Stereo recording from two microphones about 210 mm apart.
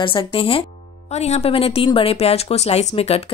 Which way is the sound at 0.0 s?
25° left (ahead or behind).